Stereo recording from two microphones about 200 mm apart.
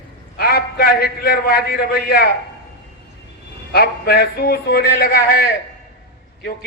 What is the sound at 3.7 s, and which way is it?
Speech, 50° left (ahead or behind).